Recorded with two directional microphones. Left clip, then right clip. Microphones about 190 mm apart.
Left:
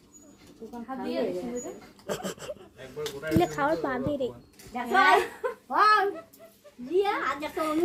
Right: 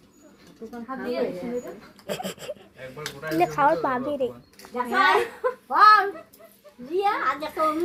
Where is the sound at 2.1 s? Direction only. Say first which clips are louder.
Right 2 dB; 10° left (ahead or behind).